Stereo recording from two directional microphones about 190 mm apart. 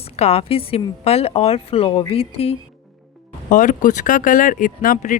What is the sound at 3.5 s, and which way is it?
Speech, 45° left (ahead or behind).